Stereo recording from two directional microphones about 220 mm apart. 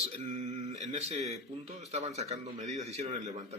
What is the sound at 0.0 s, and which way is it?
Speech, 30° right (ahead or behind).